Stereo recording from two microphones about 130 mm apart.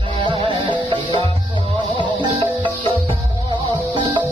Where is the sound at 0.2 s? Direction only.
45° right (ahead or behind).